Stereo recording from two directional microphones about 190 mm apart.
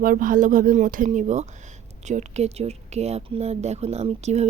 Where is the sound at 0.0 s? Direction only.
45° right (ahead or behind).